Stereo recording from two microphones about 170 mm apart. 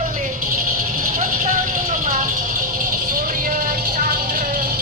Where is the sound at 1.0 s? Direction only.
55° right (ahead or behind).